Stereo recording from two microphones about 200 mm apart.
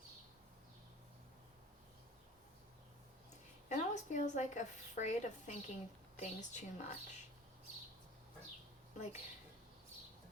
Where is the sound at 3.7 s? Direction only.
35° left (ahead or behind).